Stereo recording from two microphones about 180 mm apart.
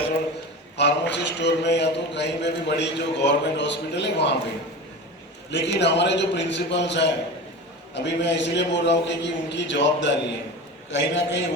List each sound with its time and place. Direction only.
0.8 s a man's voice: 70° left (ahead or behind)
5.5 s a man's voice: 75° left (ahead or behind)